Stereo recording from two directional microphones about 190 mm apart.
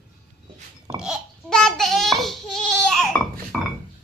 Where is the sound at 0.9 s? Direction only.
5° right (ahead or behind).